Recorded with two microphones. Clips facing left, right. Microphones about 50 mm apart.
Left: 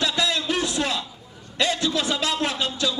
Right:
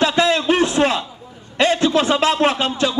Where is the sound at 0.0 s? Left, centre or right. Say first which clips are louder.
Right 8 dB; right.